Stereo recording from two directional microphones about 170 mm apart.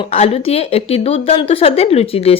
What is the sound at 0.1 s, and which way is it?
Speech, 40° left (ahead or behind).